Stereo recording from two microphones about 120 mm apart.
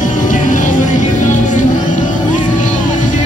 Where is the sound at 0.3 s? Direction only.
90° left.